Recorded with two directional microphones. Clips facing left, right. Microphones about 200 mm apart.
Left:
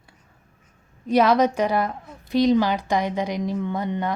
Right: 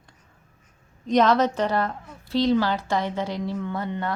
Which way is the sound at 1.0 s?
10° left (ahead or behind).